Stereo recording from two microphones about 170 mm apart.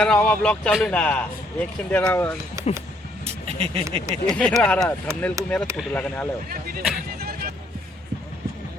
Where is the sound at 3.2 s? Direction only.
35° right (ahead or behind).